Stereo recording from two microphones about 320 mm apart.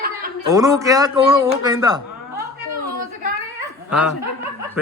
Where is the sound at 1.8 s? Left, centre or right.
Centre.